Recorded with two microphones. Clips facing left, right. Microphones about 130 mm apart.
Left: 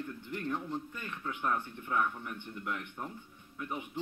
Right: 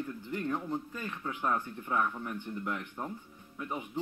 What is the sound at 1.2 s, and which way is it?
Speech, 25° right (ahead or behind).